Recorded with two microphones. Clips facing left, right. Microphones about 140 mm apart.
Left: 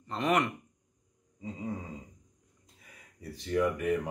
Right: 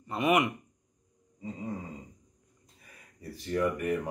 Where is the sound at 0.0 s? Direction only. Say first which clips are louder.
Right 2 dB; 10° right (ahead or behind).